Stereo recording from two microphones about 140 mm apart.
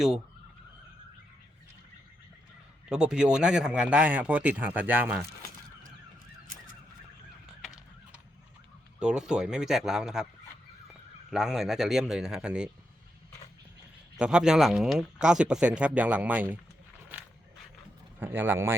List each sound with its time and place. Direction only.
2.9 s speech: 5° right (ahead or behind)
9.0 s speech: 5° right (ahead or behind)
11.3 s speech: centre (ahead or behind)
14.2 s speech: 5° right (ahead or behind)
18.2 s speech: 15° right (ahead or behind)